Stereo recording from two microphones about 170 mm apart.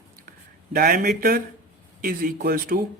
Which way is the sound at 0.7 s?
55° right (ahead or behind).